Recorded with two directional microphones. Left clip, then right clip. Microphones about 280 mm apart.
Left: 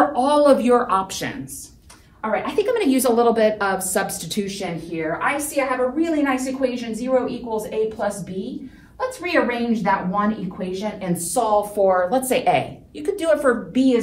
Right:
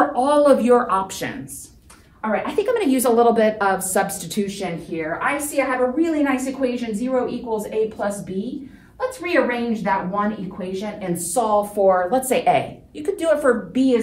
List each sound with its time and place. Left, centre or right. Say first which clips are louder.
0.1 s a woman's voice: even; centre
2.3 s a woman's voice: even; centre